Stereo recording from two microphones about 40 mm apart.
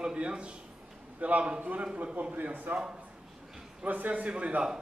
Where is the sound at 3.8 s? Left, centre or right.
Right.